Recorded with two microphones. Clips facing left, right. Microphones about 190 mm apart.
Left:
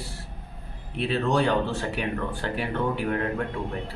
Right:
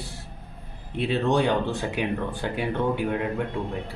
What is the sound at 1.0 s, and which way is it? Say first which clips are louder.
A man's voice: right 1 dB; 20° right (ahead or behind).